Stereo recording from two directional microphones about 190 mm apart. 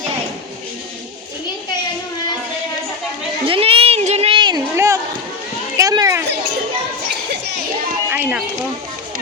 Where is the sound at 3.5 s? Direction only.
30° right (ahead or behind).